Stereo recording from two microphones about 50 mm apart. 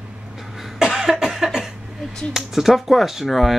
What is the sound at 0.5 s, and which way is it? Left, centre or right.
Cough, centre.